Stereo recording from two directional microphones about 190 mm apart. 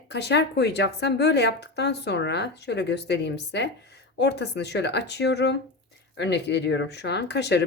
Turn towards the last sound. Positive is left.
turn(degrees=65)  # may be behind; listen again after turning